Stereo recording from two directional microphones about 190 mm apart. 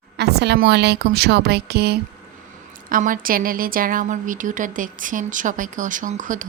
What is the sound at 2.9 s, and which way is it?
Speech, 45° right (ahead or behind).